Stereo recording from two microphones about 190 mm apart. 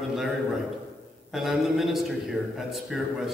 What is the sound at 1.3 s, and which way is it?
A man's voice, centre (ahead or behind).